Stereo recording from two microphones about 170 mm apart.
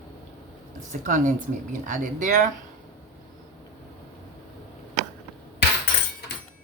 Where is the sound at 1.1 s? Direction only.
50° right (ahead or behind).